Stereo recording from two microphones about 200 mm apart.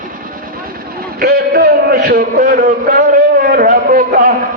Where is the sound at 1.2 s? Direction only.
50° right (ahead or behind).